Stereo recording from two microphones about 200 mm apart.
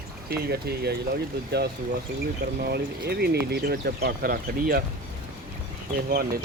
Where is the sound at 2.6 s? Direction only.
50° right (ahead or behind).